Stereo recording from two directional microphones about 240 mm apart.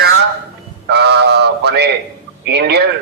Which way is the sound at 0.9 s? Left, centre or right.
Right.